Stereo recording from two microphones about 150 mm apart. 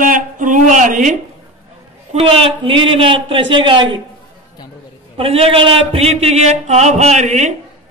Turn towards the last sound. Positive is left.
turn(degrees=-50)  # may be behind; listen again after turning